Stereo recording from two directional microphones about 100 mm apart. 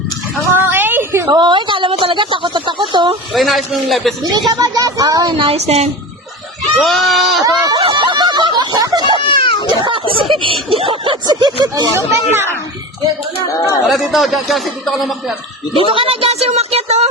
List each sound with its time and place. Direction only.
0.5 s a sound: 20° right (ahead or behind)
1.3 s a woman's voice: 50° right (ahead or behind)
3.3 s a man's voice: centre (ahead or behind)
4.2 s speech: 45° right (ahead or behind)
5.3 s speech: 70° right (ahead or behind); by 5.9 s 90° right
6.7 s a man's voice: centre (ahead or behind)
7.4 s speech: 35° right (ahead or behind)
7.8 s a sound: 60° right (ahead or behind); by 9.0 s 40° right (ahead or behind)
9.2 s a sound: 60° left (ahead or behind)
9.6 s a sound: 55° right (ahead or behind)
10.3 s speech: 60° right (ahead or behind); by 11.9 s 40° right (ahead or behind)
11.9 s speech: 25° right (ahead or behind)
13.8 s a man's voice: centre (ahead or behind)
15.9 s speech: 65° right (ahead or behind); by 17.1 s 90° right